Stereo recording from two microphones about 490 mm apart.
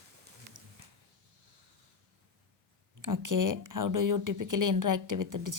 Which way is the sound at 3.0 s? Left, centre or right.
Right.